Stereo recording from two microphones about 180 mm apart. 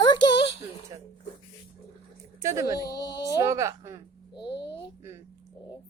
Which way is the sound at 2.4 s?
15° right (ahead or behind).